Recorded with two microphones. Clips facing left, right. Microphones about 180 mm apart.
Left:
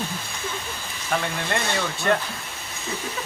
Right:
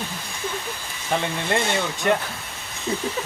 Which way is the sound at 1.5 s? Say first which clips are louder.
Right 5 dB; 20° right (ahead or behind).